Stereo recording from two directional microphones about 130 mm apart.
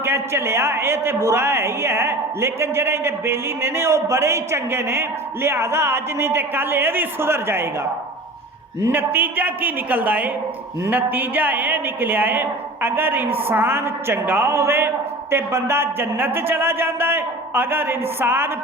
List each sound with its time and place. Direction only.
0.0 s a man's voice: 20° right (ahead or behind)
8.8 s a woman's voice: 15° right (ahead or behind)